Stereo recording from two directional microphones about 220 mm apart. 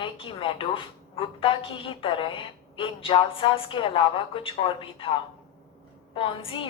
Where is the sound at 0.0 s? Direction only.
25° left (ahead or behind).